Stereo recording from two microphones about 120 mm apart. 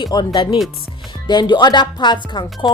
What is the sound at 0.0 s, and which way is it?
Speech, 35° left (ahead or behind).